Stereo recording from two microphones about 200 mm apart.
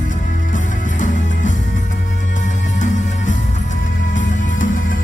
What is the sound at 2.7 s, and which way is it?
Music, 40° left (ahead or behind).